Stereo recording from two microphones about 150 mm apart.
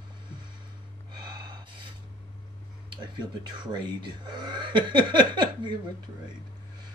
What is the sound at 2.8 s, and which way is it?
Speech, 30° right (ahead or behind).